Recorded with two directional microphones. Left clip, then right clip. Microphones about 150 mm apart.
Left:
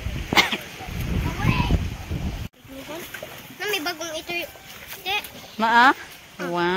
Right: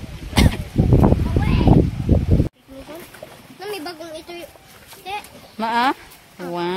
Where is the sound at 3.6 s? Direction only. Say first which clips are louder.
Left 3 dB; 40° right (ahead or behind).